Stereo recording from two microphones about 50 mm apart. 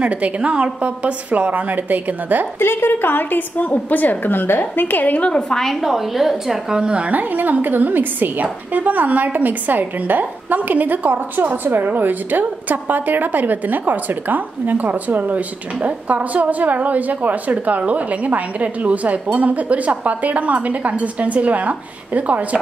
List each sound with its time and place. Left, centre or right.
0.0 s a woman's voice: right
2.6 s a woman's voice: left
5.3 s a woman's voice: centre
5.8 s a woman's voice: centre
7.1 s a woman's voice: right